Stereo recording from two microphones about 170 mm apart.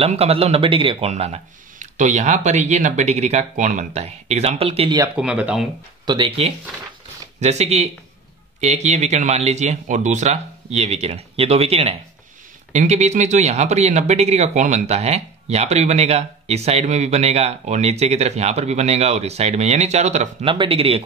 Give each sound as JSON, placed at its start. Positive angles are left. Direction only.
{"t": 0.0, "sound": "speech", "side_deg": -35}
{"t": 5.0, "sound": "speech", "side_deg": -5}
{"t": 6.0, "sound": "speech", "side_deg": -30}